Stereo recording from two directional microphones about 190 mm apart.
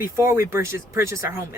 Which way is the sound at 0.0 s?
15° right (ahead or behind).